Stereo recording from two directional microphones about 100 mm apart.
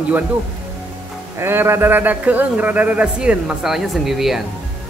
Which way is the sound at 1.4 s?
25° right (ahead or behind).